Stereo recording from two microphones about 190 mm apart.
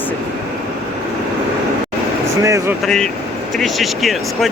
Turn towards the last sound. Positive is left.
turn(degrees=0)  # may be behind; listen again after turning